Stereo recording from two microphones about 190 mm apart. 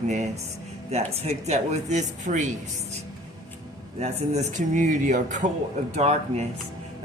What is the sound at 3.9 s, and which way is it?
Speech, 35° right (ahead or behind).